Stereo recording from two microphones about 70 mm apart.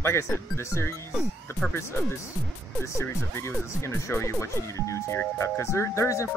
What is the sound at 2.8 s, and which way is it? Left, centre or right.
Speech, left.